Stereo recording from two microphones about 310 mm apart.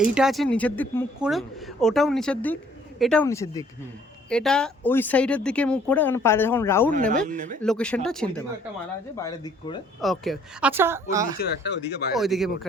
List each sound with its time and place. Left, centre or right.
0.0 s speech: centre
7.3 s speech: right
7.6 s speech: centre
10.0 s speech: centre
11.3 s speech: left
12.1 s speech: centre